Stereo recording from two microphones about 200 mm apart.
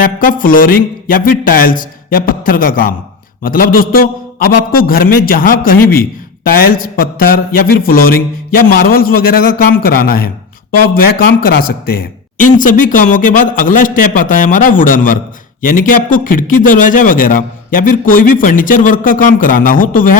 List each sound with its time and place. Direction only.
0.0 s a man's voice: 40° left (ahead or behind)
12.4 s a man's voice: 40° left (ahead or behind)